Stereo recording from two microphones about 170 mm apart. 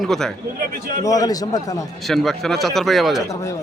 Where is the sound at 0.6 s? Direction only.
55° right (ahead or behind).